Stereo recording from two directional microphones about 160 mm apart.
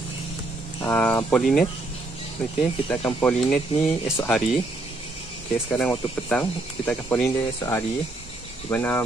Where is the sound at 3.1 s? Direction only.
10° left (ahead or behind).